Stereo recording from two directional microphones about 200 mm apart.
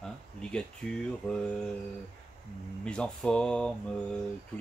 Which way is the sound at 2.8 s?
5° left (ahead or behind).